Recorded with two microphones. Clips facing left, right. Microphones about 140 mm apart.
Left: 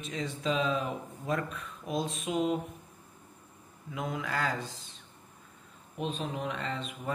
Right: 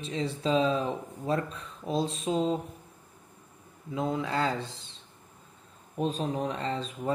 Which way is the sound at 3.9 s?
30° right (ahead or behind).